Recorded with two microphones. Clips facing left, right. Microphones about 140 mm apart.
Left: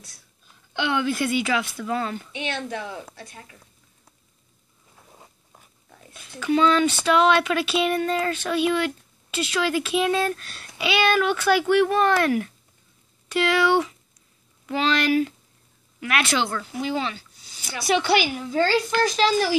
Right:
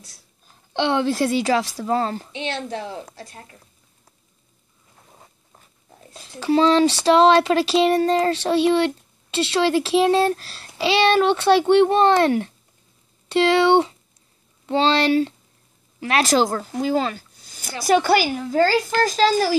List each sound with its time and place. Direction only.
0.7 s speech: 30° right (ahead or behind)
5.1 s zipper: 5° right (ahead or behind)
5.9 s speech: 30° right (ahead or behind)